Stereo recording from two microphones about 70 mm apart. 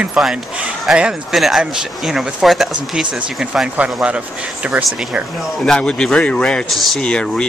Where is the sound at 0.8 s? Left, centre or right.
Centre.